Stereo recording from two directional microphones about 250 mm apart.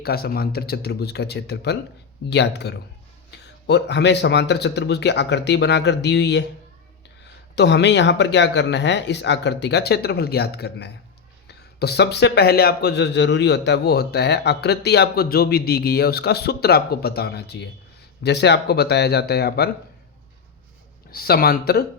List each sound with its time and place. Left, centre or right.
0.0 s speech: left
7.5 s speech: left
21.1 s speech: left